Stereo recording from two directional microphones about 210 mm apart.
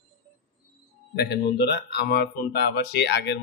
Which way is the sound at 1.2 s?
50° left (ahead or behind).